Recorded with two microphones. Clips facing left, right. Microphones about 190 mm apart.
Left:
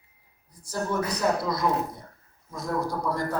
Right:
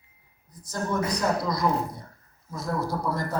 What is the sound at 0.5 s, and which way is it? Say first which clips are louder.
A man's voice: even; 10° left (ahead or behind).